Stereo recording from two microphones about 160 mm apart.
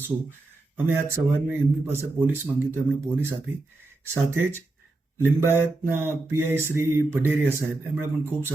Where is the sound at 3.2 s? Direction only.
15° right (ahead or behind).